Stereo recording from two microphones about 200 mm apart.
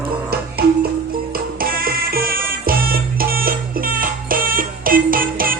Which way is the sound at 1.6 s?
45° right (ahead or behind).